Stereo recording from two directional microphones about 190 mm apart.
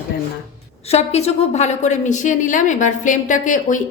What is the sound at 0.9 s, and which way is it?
Speech, 35° left (ahead or behind).